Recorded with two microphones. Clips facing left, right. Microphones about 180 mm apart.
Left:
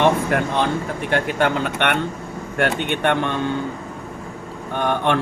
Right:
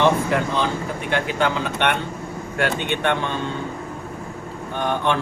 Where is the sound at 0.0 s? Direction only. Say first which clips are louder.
Left 1 dB; 60° left (ahead or behind).